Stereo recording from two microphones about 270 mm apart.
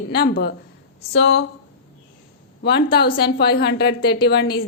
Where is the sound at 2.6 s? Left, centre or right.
Left.